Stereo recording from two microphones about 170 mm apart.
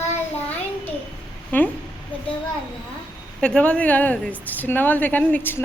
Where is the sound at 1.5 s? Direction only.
10° left (ahead or behind).